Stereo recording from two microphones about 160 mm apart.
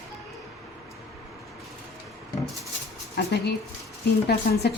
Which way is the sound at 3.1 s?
90° left.